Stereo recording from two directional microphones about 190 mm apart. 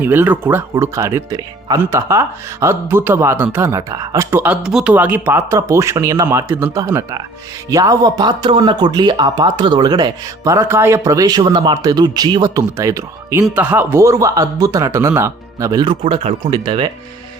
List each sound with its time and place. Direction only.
0.0 s speech: 10° right (ahead or behind)